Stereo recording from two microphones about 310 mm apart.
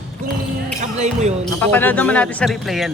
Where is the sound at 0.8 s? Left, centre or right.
Right.